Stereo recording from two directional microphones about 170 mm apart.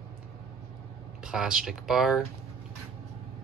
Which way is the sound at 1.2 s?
5° right (ahead or behind).